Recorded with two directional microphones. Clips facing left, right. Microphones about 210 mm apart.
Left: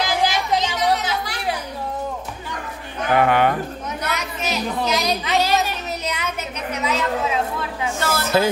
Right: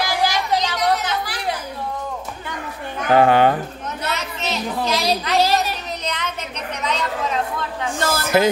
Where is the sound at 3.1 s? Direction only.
30° right (ahead or behind).